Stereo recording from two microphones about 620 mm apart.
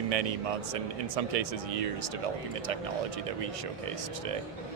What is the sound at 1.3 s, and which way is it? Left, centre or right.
Speech, right.